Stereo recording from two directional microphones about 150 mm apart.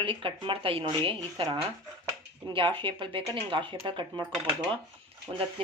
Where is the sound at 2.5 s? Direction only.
35° right (ahead or behind).